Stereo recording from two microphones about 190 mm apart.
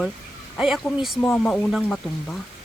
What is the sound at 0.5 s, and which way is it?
A woman's voice, 5° right (ahead or behind).